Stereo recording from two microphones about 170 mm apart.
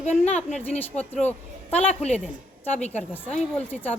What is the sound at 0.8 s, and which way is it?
A woman's voice, 10° left (ahead or behind).